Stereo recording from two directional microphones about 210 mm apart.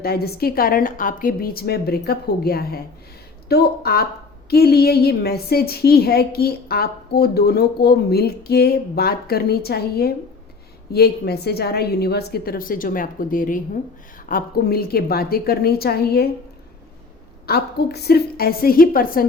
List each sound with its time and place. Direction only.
0.0 s a woman's voice: 45° left (ahead or behind)
17.4 s a woman's voice: 50° left (ahead or behind)